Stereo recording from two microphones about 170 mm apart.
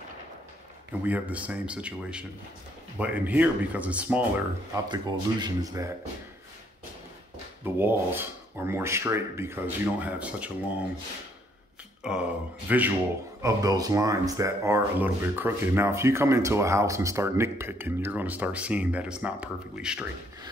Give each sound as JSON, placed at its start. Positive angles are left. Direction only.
{"t": 1.0, "sound": "speech", "side_deg": -10}
{"t": 4.8, "sound": "speech", "side_deg": -25}
{"t": 7.6, "sound": "speech", "side_deg": -10}
{"t": 12.0, "sound": "speech", "side_deg": -5}